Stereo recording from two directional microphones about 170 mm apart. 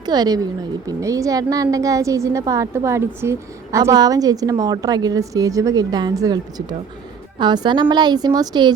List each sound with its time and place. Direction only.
0.0 s a woman's voice: 25° right (ahead or behind)